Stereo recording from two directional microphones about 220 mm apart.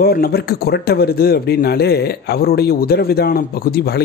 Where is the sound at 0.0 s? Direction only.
45° left (ahead or behind).